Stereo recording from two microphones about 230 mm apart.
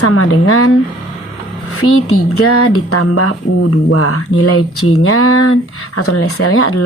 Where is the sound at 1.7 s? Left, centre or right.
Left.